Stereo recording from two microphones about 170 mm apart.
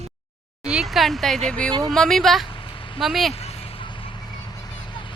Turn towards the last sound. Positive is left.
turn(degrees=30)  # may be behind; listen again after turning